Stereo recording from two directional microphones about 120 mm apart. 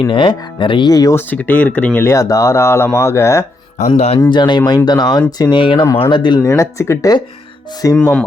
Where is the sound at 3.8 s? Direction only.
70° left (ahead or behind).